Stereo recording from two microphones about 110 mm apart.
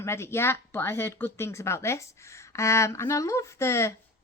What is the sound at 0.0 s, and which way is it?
A woman's voice, 25° left (ahead or behind).